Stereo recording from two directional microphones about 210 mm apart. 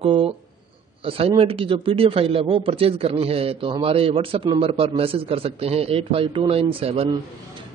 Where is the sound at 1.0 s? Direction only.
25° right (ahead or behind).